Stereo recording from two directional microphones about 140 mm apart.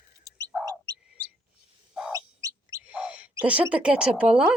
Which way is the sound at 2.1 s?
25° right (ahead or behind).